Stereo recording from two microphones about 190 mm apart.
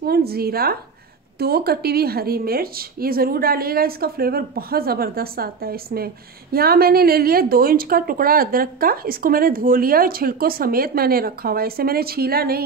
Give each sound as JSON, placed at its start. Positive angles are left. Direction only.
{"t": 0.0, "sound": "a woman's voice", "side_deg": -55}